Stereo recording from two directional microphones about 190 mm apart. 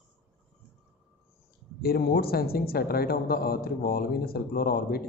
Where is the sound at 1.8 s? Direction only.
55° left (ahead or behind).